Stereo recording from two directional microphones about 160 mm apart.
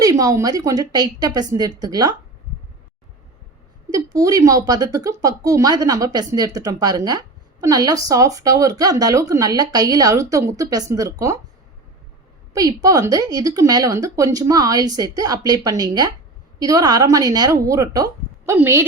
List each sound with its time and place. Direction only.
0.0 s a woman's voice: 20° right (ahead or behind)
3.8 s a woman's voice: 20° right (ahead or behind)
12.5 s a woman's voice: 20° right (ahead or behind)